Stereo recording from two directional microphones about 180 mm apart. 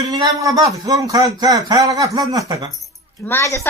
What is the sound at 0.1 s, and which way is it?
A man's voice, 20° right (ahead or behind).